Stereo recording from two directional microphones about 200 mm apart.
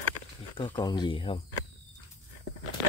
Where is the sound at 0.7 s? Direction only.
20° left (ahead or behind).